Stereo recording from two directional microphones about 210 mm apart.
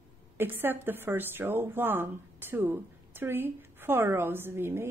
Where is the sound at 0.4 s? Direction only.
10° right (ahead or behind).